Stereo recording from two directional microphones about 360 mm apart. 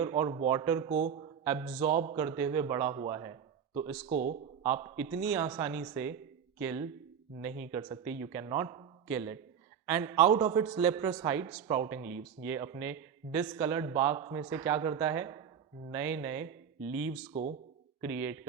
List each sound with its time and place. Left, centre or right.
0.0 s a man's voice: centre
1.9 s a man's voice: right
2.1 s a man's voice: centre
4.9 s a man's voice: centre
18.0 s a man's voice: centre